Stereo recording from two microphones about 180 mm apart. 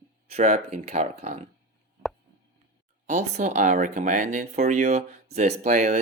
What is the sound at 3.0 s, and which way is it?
Speech, 40° right (ahead or behind).